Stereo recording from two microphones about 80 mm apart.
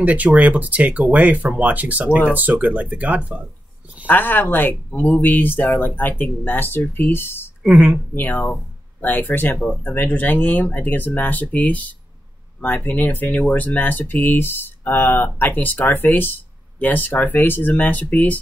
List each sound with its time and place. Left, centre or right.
0.0 s speech: centre
4.1 s speech: left
7.7 s speech: centre
8.1 s speech: left